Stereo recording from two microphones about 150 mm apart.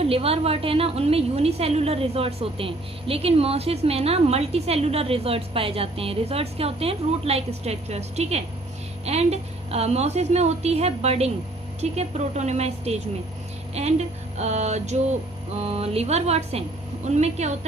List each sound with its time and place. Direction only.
0.0 s a woman's voice: 40° right (ahead or behind)